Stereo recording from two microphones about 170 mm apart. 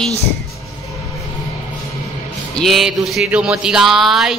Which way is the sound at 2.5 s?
Centre (ahead or behind).